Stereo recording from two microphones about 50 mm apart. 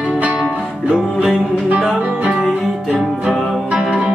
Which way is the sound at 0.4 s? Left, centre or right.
Centre.